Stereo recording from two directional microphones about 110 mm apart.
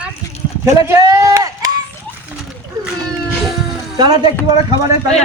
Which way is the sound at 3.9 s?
45° right (ahead or behind).